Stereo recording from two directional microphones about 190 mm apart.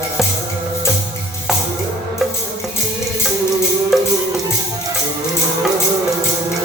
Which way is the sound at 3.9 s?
Centre (ahead or behind).